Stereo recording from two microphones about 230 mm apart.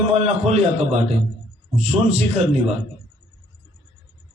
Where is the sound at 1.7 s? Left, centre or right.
Right.